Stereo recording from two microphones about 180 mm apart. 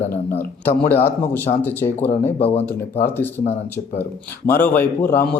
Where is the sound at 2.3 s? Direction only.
35° left (ahead or behind).